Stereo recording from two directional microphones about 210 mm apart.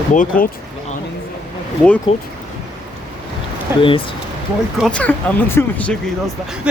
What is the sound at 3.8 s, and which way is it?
Speech, 25° left (ahead or behind).